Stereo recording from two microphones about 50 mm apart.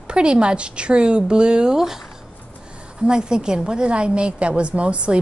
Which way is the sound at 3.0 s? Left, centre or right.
Centre.